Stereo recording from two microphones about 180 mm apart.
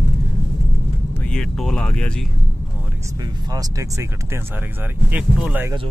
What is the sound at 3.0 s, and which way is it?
Speech, 20° right (ahead or behind).